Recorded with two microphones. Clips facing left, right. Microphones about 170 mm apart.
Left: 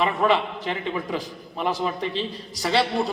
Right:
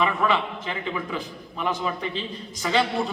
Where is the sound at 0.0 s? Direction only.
35° left (ahead or behind).